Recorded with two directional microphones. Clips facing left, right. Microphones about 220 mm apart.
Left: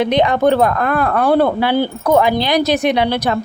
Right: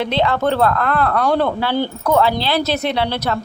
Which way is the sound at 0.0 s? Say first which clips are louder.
Left 4 dB; 15° left (ahead or behind).